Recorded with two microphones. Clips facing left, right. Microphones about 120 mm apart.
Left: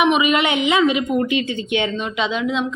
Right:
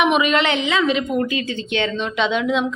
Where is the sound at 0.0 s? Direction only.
5° left (ahead or behind).